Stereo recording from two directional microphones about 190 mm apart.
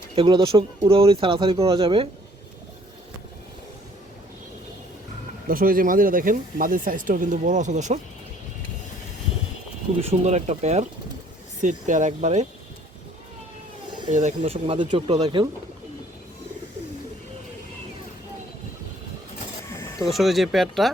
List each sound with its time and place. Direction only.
0.2 s speech: 30° right (ahead or behind)
5.5 s speech: 50° right (ahead or behind)
10.0 s speech: 35° right (ahead or behind)
14.1 s speech: 40° right (ahead or behind)
20.0 s speech: centre (ahead or behind)